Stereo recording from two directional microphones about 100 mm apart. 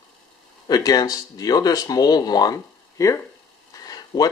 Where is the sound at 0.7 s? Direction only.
40° left (ahead or behind).